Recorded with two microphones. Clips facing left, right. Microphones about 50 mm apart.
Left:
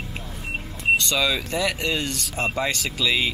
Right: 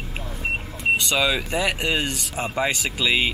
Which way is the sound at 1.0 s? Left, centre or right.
Centre.